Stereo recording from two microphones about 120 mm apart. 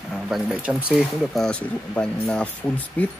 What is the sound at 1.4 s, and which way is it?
Speech, 5° left (ahead or behind).